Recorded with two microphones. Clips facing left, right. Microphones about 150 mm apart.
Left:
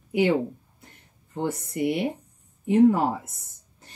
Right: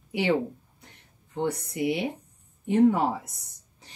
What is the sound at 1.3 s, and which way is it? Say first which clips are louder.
Speech: even; centre (ahead or behind).